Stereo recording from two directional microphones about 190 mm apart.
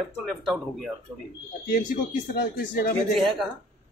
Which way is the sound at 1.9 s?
50° left (ahead or behind).